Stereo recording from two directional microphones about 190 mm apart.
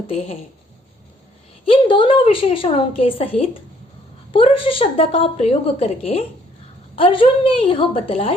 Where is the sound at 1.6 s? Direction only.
25° left (ahead or behind).